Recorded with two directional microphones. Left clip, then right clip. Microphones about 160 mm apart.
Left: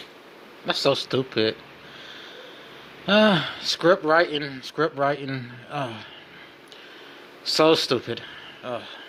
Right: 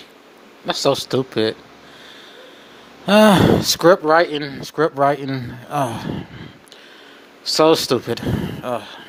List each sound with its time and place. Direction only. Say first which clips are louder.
0.6 s speech: right 4 dB; 35° right (ahead or behind)
3.1 s speech: right 7 dB; 35° right (ahead or behind)
7.5 s speech: right 4 dB; 40° right (ahead or behind)